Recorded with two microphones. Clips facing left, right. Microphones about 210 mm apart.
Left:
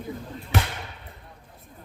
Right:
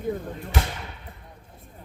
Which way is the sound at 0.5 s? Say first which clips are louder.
Left 2 dB; 60° left (ahead or behind).